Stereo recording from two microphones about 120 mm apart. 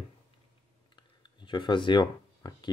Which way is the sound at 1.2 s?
40° left (ahead or behind).